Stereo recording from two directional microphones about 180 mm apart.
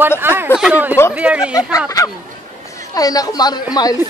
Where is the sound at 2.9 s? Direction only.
20° left (ahead or behind).